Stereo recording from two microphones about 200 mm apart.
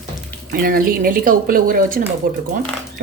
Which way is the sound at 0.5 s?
45° right (ahead or behind).